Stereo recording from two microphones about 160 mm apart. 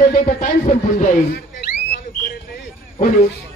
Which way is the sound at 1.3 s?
70° left (ahead or behind).